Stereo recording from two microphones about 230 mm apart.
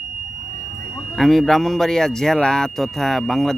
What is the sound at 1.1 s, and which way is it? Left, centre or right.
Speech, centre.